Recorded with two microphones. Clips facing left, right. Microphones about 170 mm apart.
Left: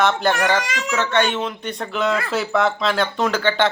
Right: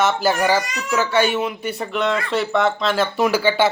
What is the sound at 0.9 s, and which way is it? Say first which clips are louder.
Speech: right 2 dB; 10° right (ahead or behind).